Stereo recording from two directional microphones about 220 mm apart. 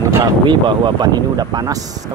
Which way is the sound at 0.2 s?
20° right (ahead or behind).